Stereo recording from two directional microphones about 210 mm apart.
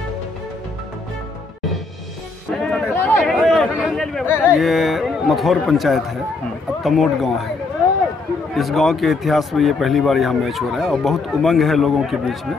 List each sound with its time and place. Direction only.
2.6 s a sound: 5° left (ahead or behind)
6.8 s speech: centre (ahead or behind)
8.5 s speech: centre (ahead or behind)